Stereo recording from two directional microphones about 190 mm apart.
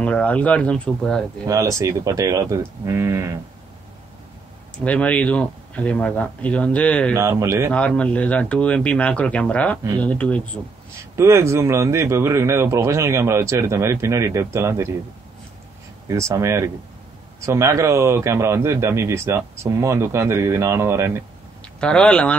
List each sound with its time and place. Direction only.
0.0 s speech: 5° left (ahead or behind)
1.5 s a man's voice: 15° right (ahead or behind)
4.8 s speech: 5° left (ahead or behind)
7.2 s a man's voice: 15° right (ahead or behind)
7.7 s speech: 5° left (ahead or behind)
11.1 s a man's voice: 15° right (ahead or behind)
16.1 s a man's voice: 15° right (ahead or behind)
21.7 s speech: 5° left (ahead or behind)